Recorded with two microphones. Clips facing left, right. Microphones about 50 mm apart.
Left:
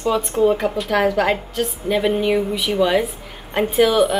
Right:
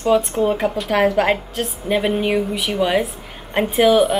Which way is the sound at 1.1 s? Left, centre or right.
Centre.